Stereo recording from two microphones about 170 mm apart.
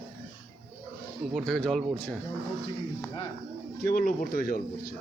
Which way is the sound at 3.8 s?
55° left (ahead or behind).